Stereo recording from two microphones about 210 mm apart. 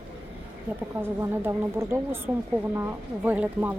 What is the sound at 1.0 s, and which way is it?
Speech, 10° right (ahead or behind).